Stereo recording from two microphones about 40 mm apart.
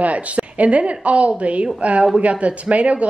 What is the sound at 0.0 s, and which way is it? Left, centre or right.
A woman's voice, right.